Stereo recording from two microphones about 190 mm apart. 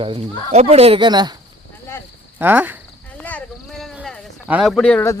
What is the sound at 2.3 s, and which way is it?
Speech, 10° right (ahead or behind).